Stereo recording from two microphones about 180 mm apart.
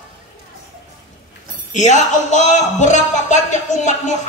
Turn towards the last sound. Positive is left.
turn(degrees=40)  # may be behind; listen again after turning